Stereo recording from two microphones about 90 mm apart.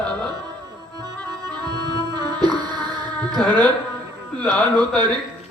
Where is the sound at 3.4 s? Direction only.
55° right (ahead or behind).